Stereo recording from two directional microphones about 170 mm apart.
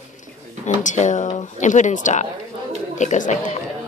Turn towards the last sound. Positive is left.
turn(degrees=45)  # may be behind; listen again after turning